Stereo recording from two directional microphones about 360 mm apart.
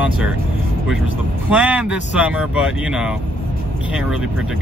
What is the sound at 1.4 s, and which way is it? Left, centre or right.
Speech, centre.